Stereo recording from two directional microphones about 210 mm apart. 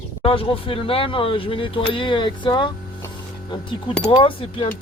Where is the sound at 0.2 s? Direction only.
25° left (ahead or behind).